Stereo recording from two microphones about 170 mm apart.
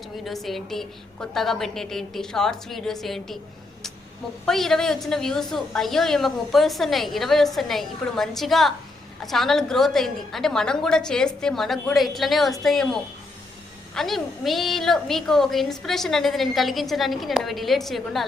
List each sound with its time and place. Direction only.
0.3 s a woman's voice: centre (ahead or behind)
4.4 s a woman's voice: centre (ahead or behind)